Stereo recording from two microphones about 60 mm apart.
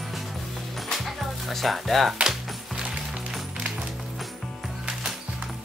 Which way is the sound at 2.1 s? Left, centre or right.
Centre.